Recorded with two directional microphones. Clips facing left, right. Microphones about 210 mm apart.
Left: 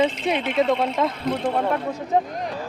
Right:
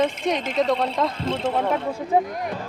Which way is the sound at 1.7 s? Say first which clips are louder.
Right 1 dB; 10° right (ahead or behind).